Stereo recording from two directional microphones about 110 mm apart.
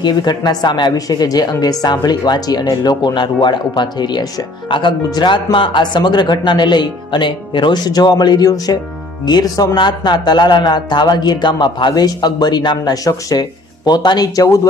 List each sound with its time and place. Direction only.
0.0 s a woman's voice: 40° left (ahead or behind)